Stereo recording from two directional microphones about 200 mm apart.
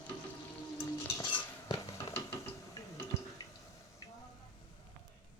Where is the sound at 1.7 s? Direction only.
15° left (ahead or behind).